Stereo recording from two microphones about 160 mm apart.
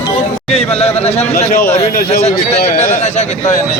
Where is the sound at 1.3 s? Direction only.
65° left (ahead or behind).